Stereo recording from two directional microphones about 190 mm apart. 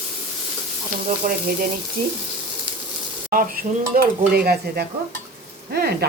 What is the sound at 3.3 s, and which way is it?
Dishes, 50° right (ahead or behind).